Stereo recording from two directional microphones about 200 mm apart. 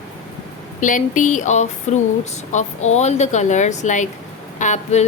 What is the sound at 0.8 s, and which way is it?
Speech, 40° left (ahead or behind).